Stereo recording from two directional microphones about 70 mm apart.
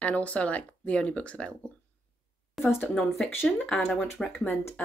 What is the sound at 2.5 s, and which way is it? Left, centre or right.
Speech, centre.